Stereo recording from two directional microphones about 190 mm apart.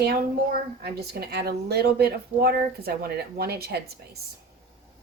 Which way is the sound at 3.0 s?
55° right (ahead or behind).